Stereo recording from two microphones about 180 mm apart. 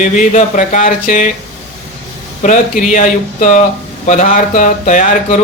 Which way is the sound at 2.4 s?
45° left (ahead or behind).